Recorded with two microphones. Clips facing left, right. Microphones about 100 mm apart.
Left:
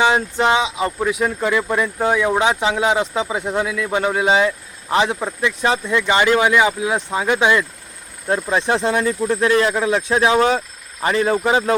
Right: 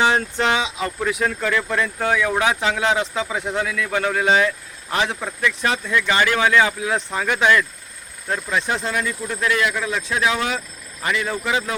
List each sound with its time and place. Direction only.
0.0 s speech: 15° left (ahead or behind)
9.0 s speech: 35° left (ahead or behind)